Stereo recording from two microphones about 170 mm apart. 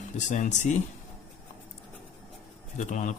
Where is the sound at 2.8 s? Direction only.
45° left (ahead or behind).